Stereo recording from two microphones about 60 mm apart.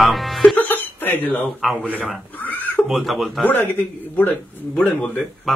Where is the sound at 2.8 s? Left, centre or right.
Centre.